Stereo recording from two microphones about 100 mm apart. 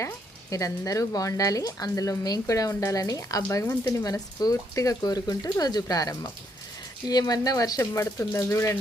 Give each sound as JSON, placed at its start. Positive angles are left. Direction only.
{"t": 0.5, "sound": "a woman's voice", "side_deg": 35}
{"t": 7.8, "sound": "speech", "side_deg": 25}